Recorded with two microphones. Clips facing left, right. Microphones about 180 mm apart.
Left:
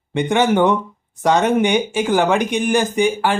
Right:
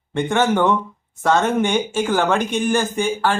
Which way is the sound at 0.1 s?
15° left (ahead or behind).